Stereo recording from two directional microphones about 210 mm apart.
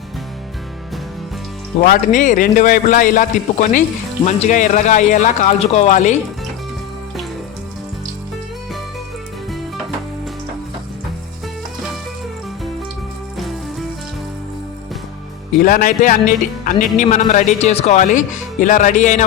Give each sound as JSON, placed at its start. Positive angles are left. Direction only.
{"t": 1.8, "sound": "speech", "side_deg": 40}
{"t": 15.6, "sound": "speech", "side_deg": 40}